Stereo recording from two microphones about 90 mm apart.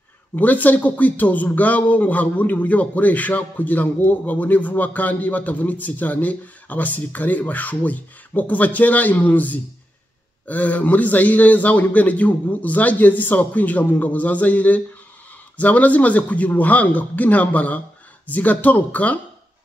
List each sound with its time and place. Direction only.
0.4 s speech: 20° left (ahead or behind)